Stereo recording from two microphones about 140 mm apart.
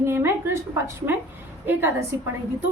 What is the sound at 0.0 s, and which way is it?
Speech, 15° right (ahead or behind).